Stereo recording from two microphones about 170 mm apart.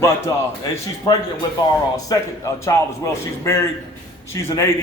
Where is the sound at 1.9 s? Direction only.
20° left (ahead or behind).